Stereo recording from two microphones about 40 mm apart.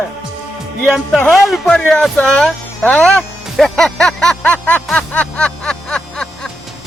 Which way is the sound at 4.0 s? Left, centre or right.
Centre.